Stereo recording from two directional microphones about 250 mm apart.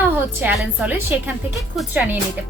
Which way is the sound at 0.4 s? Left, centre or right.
Centre.